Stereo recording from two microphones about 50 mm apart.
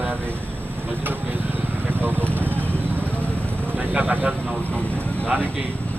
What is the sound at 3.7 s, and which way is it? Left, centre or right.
Speech, right.